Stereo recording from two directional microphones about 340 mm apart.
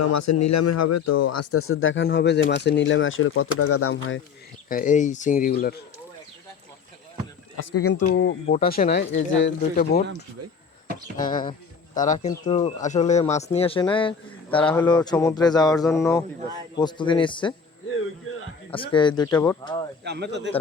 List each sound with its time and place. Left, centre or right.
0.0 s speech: left
4.7 s speech: left
7.5 s speech: left
7.9 s speech: left
11.2 s speech: left
18.8 s speech: centre
20.1 s a man's voice: right